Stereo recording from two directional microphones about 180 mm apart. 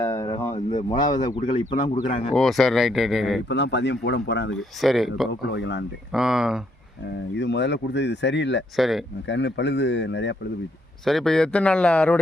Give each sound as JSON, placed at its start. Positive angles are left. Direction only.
{"t": 0.0, "sound": "a sound", "side_deg": 20}
{"t": 0.5, "sound": "a sound", "side_deg": 40}
{"t": 0.9, "sound": "speech", "side_deg": 25}
{"t": 1.7, "sound": "speech", "side_deg": 40}
{"t": 2.3, "sound": "speech", "side_deg": 0}
{"t": 3.5, "sound": "speech", "side_deg": 70}
{"t": 4.5, "sound": "speech", "side_deg": 0}
{"t": 5.5, "sound": "speech", "side_deg": 80}
{"t": 6.1, "sound": "speech", "side_deg": -5}
{"t": 7.3, "sound": "speech", "side_deg": 80}
{"t": 8.7, "sound": "speech", "side_deg": 0}
{"t": 9.2, "sound": "speech", "side_deg": 85}
{"t": 11.0, "sound": "speech", "side_deg": 0}